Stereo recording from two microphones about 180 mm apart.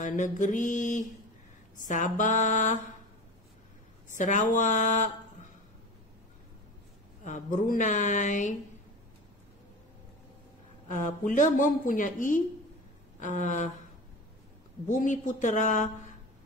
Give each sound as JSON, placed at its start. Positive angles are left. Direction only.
{"t": 0.0, "sound": "a woman's voice", "side_deg": 45}
{"t": 4.1, "sound": "speech", "side_deg": 45}
{"t": 7.2, "sound": "a woman's voice", "side_deg": 45}
{"t": 10.9, "sound": "a woman's voice", "side_deg": 45}
{"t": 14.9, "sound": "a woman's voice", "side_deg": 45}